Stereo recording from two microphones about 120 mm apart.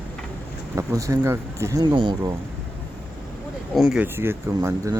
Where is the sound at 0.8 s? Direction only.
25° right (ahead or behind).